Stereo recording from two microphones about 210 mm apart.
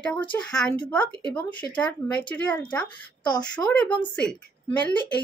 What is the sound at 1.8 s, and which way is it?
A woman's voice, 5° left (ahead or behind).